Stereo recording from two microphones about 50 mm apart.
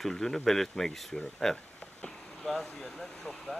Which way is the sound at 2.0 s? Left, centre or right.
Centre.